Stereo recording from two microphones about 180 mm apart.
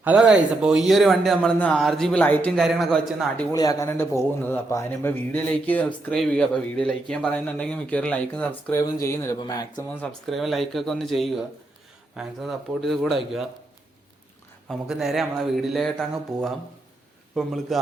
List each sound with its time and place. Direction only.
0.0 s a man's voice: 5° right (ahead or behind); by 2.5 s 10° left (ahead or behind)
2.6 s a man's voice: centre (ahead or behind)
3.5 s a man's voice: 20° left (ahead or behind)
10.0 s a man's voice: centre (ahead or behind)
14.7 s a man's voice: centre (ahead or behind)